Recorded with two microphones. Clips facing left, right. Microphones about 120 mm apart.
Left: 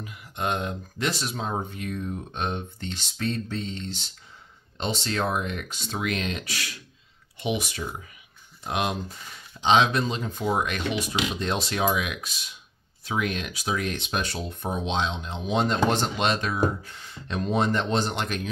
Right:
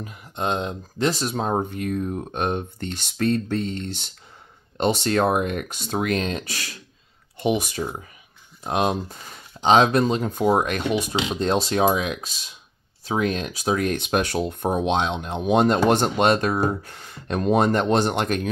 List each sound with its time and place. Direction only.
0.0 s speech: 35° right (ahead or behind)
11.1 s speech: 30° right (ahead or behind); by 18.5 s 50° right (ahead or behind)